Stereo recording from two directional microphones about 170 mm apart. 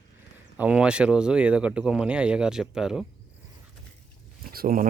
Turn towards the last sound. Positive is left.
turn(degrees=-55)  # may be behind; listen again after turning